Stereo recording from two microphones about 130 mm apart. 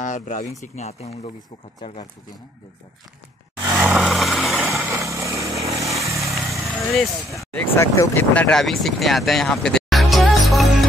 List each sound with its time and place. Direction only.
0.0 s speech: 75° left (ahead or behind)
0.6 s speech: 60° left (ahead or behind)
3.7 s vehicle: 15° right (ahead or behind)
4.0 s vehicle: centre (ahead or behind)
4.7 s vehicle: 20° right (ahead or behind)
6.7 s speech: centre (ahead or behind)
7.3 s speech: 20° left (ahead or behind)
8.5 s music: 5° left (ahead or behind)